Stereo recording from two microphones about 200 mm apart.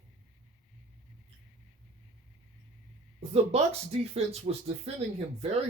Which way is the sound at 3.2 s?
30° right (ahead or behind).